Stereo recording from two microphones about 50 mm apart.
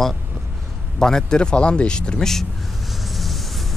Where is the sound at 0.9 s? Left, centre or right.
Centre.